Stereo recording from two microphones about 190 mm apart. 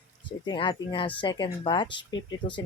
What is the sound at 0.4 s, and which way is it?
Speech, 25° left (ahead or behind).